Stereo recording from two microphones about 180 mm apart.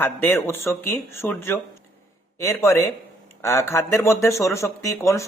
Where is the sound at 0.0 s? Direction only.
10° left (ahead or behind).